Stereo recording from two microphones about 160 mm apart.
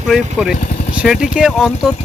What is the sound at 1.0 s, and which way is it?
Speech, 5° right (ahead or behind).